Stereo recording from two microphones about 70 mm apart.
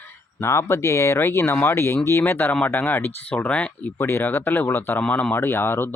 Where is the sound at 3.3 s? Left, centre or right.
Centre.